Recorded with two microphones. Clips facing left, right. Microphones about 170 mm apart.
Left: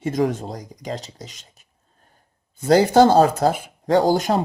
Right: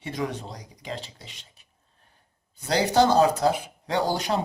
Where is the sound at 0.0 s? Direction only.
45° left (ahead or behind).